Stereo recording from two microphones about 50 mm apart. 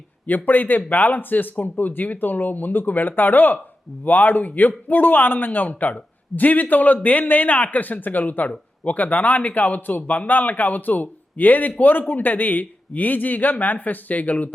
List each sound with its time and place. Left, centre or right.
0.3 s a man's voice: left